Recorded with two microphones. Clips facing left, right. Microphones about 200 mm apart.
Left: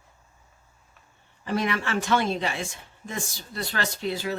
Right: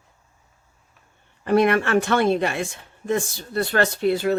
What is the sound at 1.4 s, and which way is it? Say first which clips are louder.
Speech: right 9 dB; 60° right (ahead or behind).